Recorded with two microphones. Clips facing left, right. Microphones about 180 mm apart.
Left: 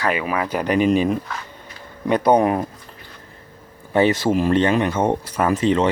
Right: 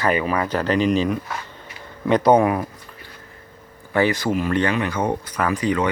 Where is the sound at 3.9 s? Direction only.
20° left (ahead or behind).